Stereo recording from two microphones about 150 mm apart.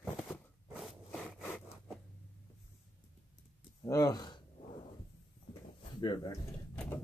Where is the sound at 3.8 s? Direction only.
20° left (ahead or behind).